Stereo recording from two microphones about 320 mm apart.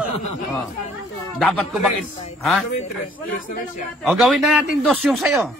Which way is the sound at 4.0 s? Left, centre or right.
Centre.